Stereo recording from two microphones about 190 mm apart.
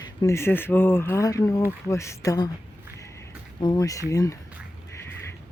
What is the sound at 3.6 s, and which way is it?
Speech, 20° left (ahead or behind).